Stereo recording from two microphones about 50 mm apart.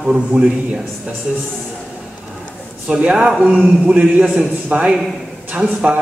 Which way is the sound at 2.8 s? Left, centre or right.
Right.